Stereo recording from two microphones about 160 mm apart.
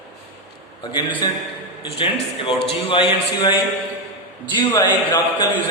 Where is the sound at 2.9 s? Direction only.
30° left (ahead or behind).